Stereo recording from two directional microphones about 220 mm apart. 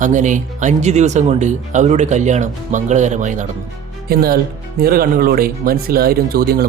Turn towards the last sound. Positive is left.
turn(degrees=-45)  # may be behind; listen again after turning